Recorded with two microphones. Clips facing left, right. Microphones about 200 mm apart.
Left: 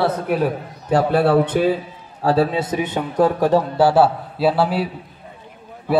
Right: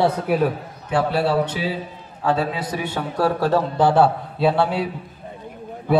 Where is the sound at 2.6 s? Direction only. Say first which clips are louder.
Left 4 dB; 20° left (ahead or behind); by 4.8 s 5° left (ahead or behind).